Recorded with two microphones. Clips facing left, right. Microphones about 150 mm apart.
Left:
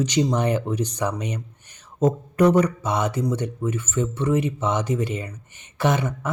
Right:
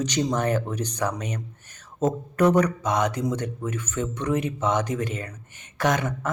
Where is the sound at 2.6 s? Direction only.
10° left (ahead or behind).